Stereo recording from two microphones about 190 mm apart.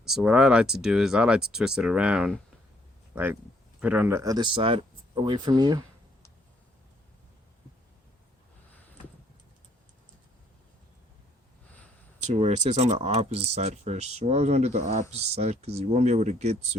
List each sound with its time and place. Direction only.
0.0 s speech: 5° right (ahead or behind)
3.8 s speech: 10° right (ahead or behind)
12.2 s speech: 35° right (ahead or behind)